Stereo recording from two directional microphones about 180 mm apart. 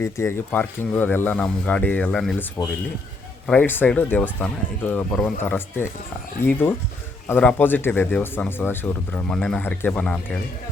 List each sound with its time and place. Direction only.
0.0 s speech: 15° left (ahead or behind)